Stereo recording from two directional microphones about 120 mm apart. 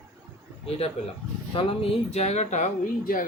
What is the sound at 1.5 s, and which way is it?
Speech, 50° left (ahead or behind).